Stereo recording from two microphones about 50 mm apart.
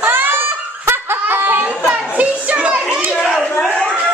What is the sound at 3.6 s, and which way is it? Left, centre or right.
Speech, centre.